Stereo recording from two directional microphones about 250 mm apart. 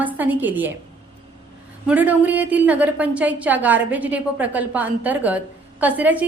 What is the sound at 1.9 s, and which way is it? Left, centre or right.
A woman's voice, centre.